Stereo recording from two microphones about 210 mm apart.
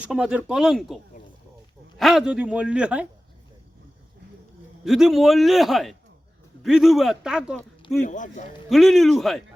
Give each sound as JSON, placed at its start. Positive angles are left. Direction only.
{"t": 0.0, "sound": "speech", "side_deg": -5}
{"t": 2.0, "sound": "speech", "side_deg": 0}
{"t": 4.9, "sound": "speech", "side_deg": 0}
{"t": 8.0, "sound": "speech", "side_deg": 35}
{"t": 8.7, "sound": "speech", "side_deg": 0}